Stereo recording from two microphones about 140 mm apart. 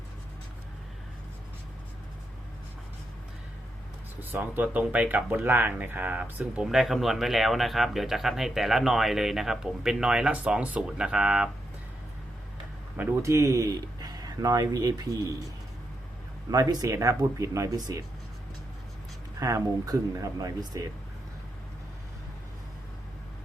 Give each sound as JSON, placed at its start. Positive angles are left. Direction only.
{"t": 4.2, "sound": "speech", "side_deg": -15}
{"t": 13.0, "sound": "speech", "side_deg": -15}
{"t": 16.5, "sound": "speech", "side_deg": -30}
{"t": 19.4, "sound": "speech", "side_deg": -25}